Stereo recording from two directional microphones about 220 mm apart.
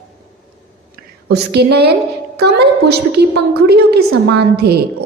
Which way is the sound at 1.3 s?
50° right (ahead or behind).